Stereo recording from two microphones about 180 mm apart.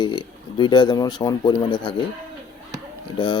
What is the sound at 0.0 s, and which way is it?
Speech, 25° left (ahead or behind).